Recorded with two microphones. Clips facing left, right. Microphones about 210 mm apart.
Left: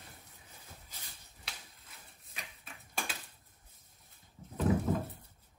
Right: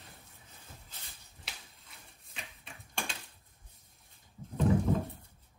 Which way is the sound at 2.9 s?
5° left (ahead or behind).